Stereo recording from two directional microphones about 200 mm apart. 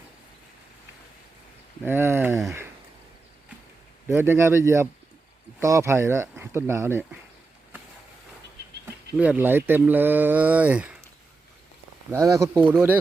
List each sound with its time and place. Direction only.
1.8 s speech: 10° right (ahead or behind)
4.1 s speech: 10° right (ahead or behind)
8.6 s a sound: 55° right (ahead or behind)
9.1 s speech: 5° right (ahead or behind)
12.1 s speech: 15° right (ahead or behind)